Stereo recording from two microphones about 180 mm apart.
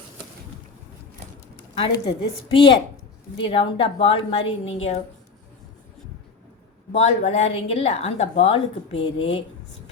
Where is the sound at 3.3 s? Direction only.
30° left (ahead or behind).